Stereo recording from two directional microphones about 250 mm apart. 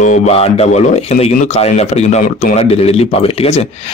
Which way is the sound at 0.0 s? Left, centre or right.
Left.